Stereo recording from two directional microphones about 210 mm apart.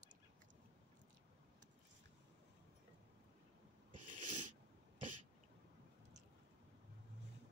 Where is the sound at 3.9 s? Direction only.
90° right.